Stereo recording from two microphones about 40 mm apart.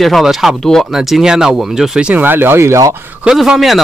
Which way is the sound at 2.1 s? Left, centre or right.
Right.